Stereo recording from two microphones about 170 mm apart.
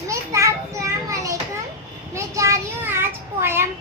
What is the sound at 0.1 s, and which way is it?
Children playing, 20° right (ahead or behind).